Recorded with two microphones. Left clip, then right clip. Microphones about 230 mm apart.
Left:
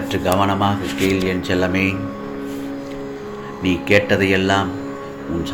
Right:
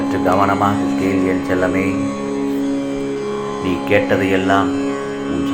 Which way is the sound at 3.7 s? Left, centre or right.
Left.